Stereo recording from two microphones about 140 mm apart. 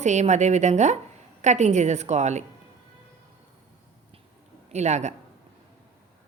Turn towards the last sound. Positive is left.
turn(degrees=-55)  # may be behind; listen again after turning